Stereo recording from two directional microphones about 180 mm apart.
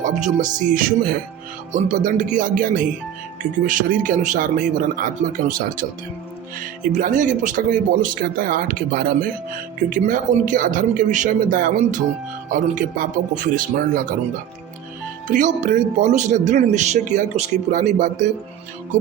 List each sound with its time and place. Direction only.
0.0 s speech: 45° right (ahead or behind)
6.9 s speech: 45° right (ahead or behind)
15.3 s speech: 45° right (ahead or behind)